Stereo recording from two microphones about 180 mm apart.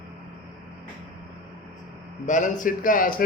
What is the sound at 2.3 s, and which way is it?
Speech, 45° left (ahead or behind).